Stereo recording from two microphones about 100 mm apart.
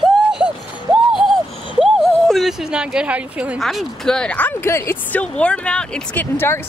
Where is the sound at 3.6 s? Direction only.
Centre (ahead or behind); by 4.9 s 25° left (ahead or behind).